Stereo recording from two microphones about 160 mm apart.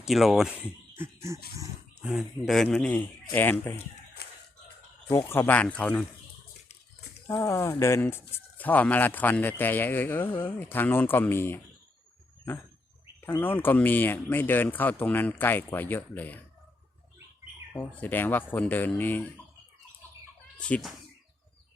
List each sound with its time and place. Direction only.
0.0 s a man's voice: centre (ahead or behind)
0.9 s a sound: 15° right (ahead or behind)
2.0 s a man's voice: 5° right (ahead or behind); by 3.8 s 15° left (ahead or behind)
4.2 s a sound: 85° left
5.1 s speech: 15° left (ahead or behind)
7.3 s speech: 15° left (ahead or behind)
13.2 s speech: 15° left (ahead or behind)
17.7 s speech: 10° left (ahead or behind)
20.6 s speech: 5° left (ahead or behind)